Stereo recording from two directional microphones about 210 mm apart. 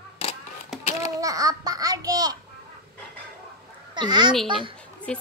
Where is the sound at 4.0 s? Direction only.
20° right (ahead or behind).